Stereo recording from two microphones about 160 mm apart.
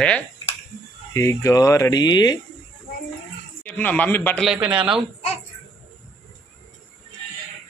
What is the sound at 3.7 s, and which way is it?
Speech, 10° left (ahead or behind).